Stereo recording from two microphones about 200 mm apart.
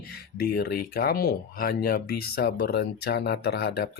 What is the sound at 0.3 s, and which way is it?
Speech, 50° left (ahead or behind).